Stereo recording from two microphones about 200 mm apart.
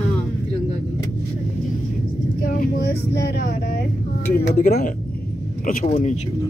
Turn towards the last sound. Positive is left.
turn(degrees=35)  # may be behind; listen again after turning